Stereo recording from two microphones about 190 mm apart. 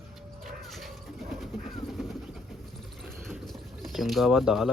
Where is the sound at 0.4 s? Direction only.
Centre (ahead or behind).